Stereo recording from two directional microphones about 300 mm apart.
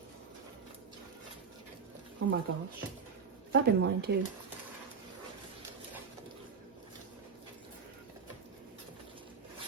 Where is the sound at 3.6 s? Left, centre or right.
Right.